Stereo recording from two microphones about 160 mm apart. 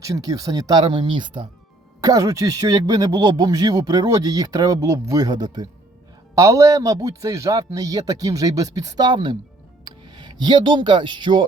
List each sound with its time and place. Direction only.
0.0 s speech: 20° right (ahead or behind)